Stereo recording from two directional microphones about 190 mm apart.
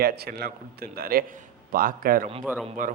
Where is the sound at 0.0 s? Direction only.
55° right (ahead or behind).